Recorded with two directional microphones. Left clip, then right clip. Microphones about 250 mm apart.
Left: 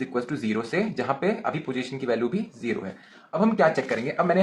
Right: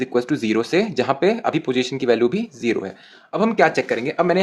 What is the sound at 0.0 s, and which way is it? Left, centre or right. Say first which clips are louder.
Speech: right 8 dB; right.